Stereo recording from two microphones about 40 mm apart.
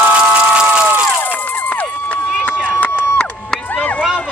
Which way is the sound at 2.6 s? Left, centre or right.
Left.